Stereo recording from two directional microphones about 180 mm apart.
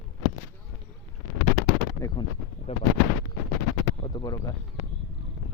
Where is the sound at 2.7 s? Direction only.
35° left (ahead or behind).